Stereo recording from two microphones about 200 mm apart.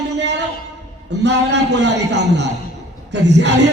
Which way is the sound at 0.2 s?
60° right (ahead or behind).